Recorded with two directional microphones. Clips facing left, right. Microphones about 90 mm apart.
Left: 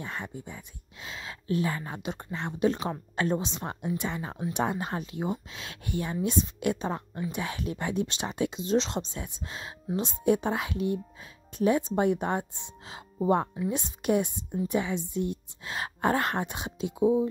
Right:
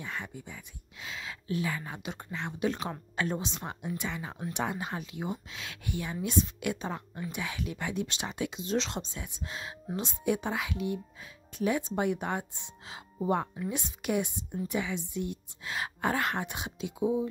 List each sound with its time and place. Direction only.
0.0 s speech: 35° left (ahead or behind)